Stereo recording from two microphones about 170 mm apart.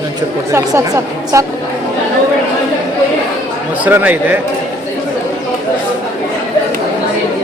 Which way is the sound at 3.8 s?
10° right (ahead or behind).